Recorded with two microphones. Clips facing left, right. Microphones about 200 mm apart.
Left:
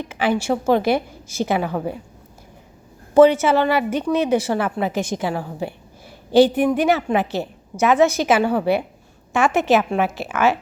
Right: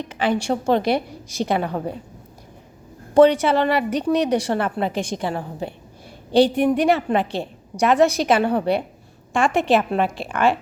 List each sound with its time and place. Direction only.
0.0 s a woman's voice: 5° left (ahead or behind)
3.2 s a woman's voice: 5° left (ahead or behind)